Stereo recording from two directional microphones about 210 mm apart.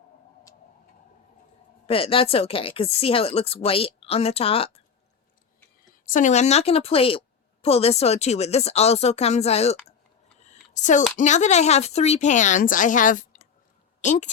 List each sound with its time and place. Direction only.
1.9 s a woman's voice: 25° left (ahead or behind)
5.9 s a woman's voice: 40° left (ahead or behind)
10.4 s a sound: 35° left (ahead or behind)
11.2 s a woman's voice: 35° left (ahead or behind)